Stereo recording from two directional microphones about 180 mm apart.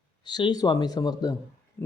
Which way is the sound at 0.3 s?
25° left (ahead or behind).